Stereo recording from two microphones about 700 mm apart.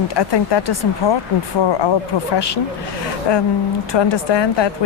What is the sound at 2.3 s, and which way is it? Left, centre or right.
Speech, left.